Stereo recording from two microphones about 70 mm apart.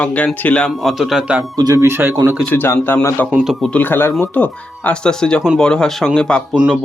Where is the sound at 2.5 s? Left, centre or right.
Left; by 6.4 s centre.